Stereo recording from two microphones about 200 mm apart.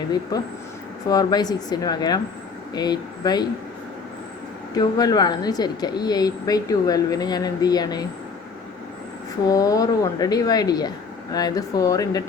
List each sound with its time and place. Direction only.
0.1 s speech: 20° left (ahead or behind)
4.7 s speech: 20° left (ahead or behind)
9.5 s speech: 20° left (ahead or behind)